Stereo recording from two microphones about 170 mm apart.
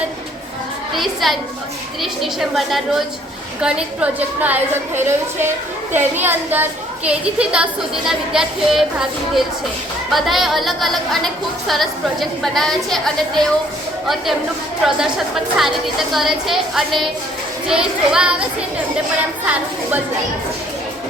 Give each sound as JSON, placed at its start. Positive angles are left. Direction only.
{"t": 0.9, "sound": "a woman's voice", "side_deg": 0}
{"t": 14.8, "sound": "a woman's voice", "side_deg": -5}